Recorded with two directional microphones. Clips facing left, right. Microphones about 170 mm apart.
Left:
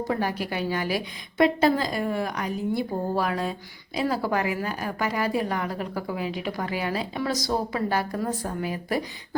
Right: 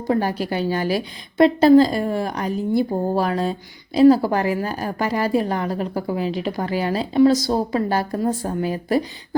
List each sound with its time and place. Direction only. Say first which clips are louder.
0.1 s a woman's voice: right 10 dB; 30° right (ahead or behind)